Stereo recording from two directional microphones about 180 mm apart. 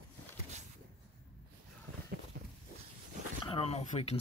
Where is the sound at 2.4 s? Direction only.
60° right (ahead or behind).